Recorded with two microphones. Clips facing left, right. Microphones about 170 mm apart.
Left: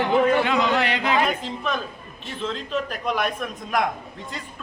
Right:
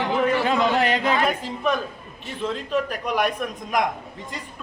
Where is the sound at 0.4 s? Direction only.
45° right (ahead or behind).